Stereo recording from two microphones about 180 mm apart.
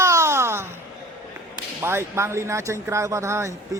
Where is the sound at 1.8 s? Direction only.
15° right (ahead or behind).